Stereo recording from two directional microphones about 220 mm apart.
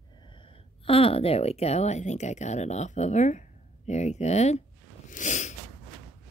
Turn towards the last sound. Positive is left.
turn(degrees=35)  # may be behind; listen again after turning